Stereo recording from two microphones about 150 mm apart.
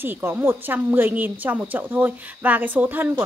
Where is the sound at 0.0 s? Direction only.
15° right (ahead or behind).